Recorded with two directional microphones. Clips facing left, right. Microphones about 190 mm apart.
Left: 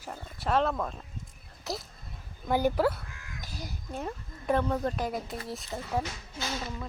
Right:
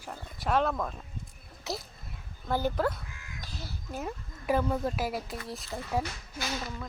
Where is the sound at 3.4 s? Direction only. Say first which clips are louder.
Left 2 dB; 15° left (ahead or behind).